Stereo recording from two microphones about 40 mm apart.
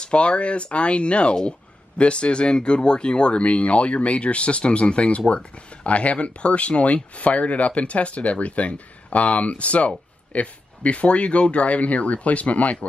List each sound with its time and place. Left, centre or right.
0.0 s speech: left